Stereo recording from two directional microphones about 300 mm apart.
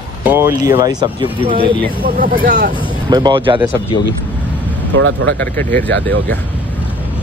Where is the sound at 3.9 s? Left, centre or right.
Centre.